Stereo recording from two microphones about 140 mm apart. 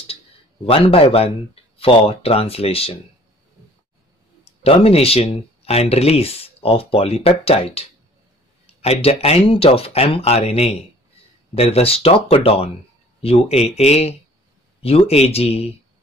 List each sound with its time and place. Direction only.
0.7 s speech: 40° left (ahead or behind)
4.6 s speech: 45° left (ahead or behind)